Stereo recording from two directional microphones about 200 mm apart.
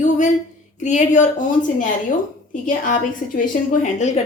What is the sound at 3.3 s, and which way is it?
Speech, 40° left (ahead or behind).